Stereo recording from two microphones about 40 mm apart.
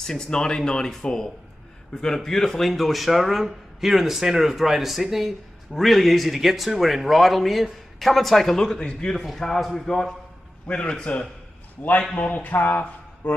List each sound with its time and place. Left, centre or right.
0.0 s a man's voice: centre
8.5 s a man's voice: centre
9.1 s a man's voice: centre
10.7 s a man's voice: left
12.4 s speech: left